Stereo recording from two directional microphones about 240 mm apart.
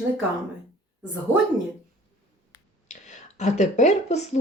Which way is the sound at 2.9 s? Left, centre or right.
Left.